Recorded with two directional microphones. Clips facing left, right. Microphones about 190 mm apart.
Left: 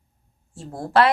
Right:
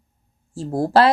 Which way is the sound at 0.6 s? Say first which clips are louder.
Right 3 dB; 35° right (ahead or behind).